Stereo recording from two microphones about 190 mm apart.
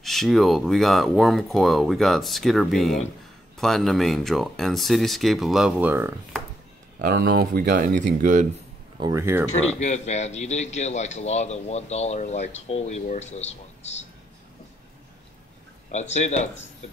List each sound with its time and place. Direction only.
0.0 s speech: centre (ahead or behind)
7.0 s speech: 50° right (ahead or behind)
7.9 s speech: 40° right (ahead or behind)
9.0 s speech: 15° right (ahead or behind)
9.8 s speech: 35° left (ahead or behind)
15.9 s speech: 35° left (ahead or behind)